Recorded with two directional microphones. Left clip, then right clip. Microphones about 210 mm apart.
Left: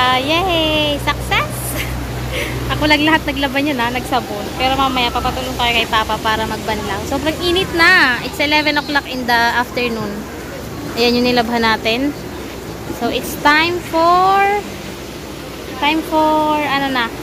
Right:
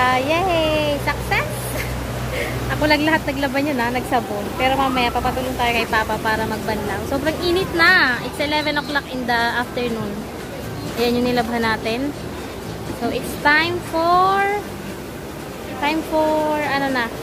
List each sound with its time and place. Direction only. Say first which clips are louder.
0.0 s a sound: left 3 dB; centre (ahead or behind)
2.3 s a woman's voice: left 3 dB; centre (ahead or behind); by 9.9 s 15° left (ahead or behind)
11.0 s speech: left 5 dB; 20° left (ahead or behind)
13.0 s speech: left 4 dB; 20° left (ahead or behind)
16.5 s speech: left 4 dB; 10° left (ahead or behind)